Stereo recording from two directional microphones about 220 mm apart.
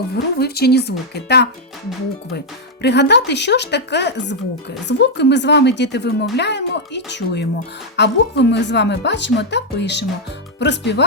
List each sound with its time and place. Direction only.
0.1 s speech: 45° left (ahead or behind)
2.8 s speech: 50° left (ahead or behind)